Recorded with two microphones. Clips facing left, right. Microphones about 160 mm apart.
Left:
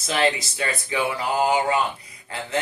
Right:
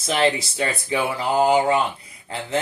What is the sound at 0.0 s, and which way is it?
Speech, 30° right (ahead or behind).